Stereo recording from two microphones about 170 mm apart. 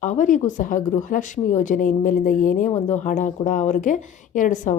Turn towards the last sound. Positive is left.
turn(degrees=50)  # may be behind; listen again after turning